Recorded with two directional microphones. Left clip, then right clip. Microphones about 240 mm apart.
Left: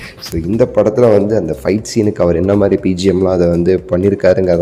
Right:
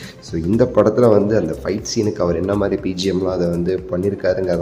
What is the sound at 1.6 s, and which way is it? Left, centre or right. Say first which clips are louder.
Speech: left 6 dB; left.